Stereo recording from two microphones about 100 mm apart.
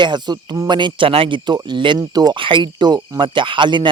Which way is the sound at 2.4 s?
55° right (ahead or behind).